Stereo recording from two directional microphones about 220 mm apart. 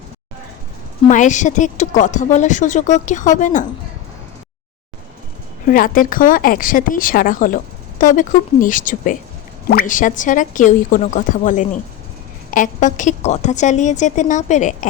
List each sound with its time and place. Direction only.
1.0 s speech: 35° left (ahead or behind)
5.6 s speech: 40° left (ahead or behind)